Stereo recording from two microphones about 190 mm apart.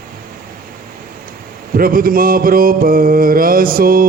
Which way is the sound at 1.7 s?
50° right (ahead or behind).